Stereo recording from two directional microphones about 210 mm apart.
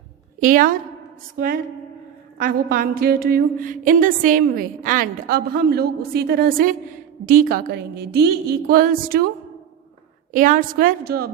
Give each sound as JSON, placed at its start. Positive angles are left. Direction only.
{"t": 0.3, "sound": "a woman's voice", "side_deg": -40}
{"t": 2.4, "sound": "a sound", "side_deg": -45}
{"t": 10.3, "sound": "a woman's voice", "side_deg": -40}